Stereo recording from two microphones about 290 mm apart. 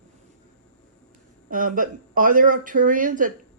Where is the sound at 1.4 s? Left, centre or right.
Right.